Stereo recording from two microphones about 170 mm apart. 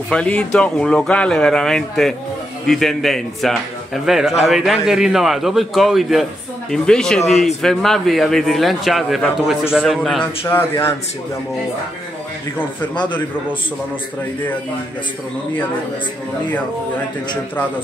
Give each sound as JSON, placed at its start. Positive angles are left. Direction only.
{"t": 0.1, "sound": "a man's voice", "side_deg": 5}
{"t": 10.4, "sound": "a man's voice", "side_deg": 15}
{"t": 12.9, "sound": "a man's voice", "side_deg": 30}